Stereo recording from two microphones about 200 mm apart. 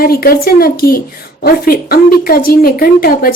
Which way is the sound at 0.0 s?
50° left (ahead or behind).